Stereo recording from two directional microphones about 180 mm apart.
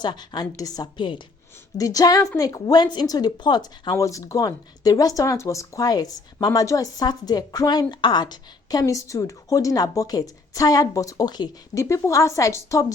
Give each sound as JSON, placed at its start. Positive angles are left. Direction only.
{"t": 0.0, "sound": "speech", "side_deg": 25}